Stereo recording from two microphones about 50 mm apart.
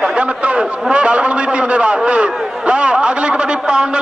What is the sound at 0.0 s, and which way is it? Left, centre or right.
A man's voice, right.